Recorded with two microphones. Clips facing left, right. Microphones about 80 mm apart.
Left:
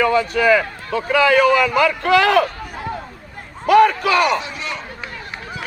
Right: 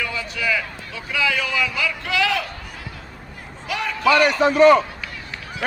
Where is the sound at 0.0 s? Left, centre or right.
Left.